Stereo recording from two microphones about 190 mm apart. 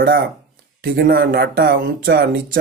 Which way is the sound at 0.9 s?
50° right (ahead or behind).